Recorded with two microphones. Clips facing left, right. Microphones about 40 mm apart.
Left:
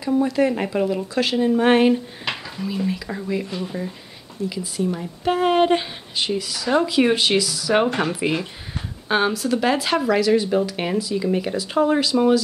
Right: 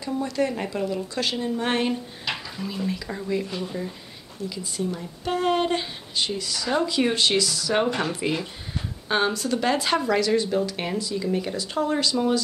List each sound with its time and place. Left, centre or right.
0.0 s speech: centre
0.7 s speech: left
1.1 s speech: centre
1.4 s speech: left